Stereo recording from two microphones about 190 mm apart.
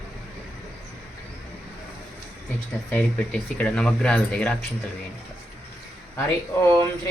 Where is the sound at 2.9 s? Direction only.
10° left (ahead or behind).